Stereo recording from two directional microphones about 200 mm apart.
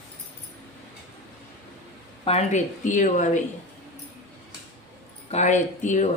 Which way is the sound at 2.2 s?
35° left (ahead or behind).